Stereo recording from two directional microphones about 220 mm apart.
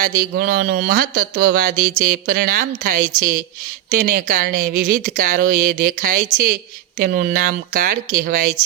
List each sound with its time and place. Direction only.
0.0 s speech: 45° right (ahead or behind)